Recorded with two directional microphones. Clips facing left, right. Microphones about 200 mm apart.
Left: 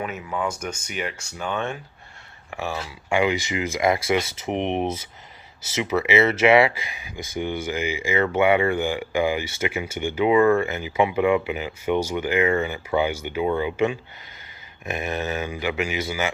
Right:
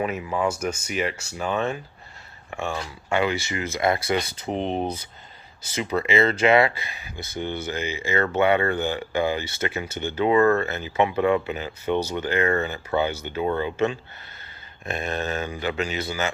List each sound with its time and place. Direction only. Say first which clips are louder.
0.0 s speech: right 3 dB; 10° right (ahead or behind); by 4.9 s 20° left (ahead or behind)
5.8 s speech: left 2 dB; 10° left (ahead or behind)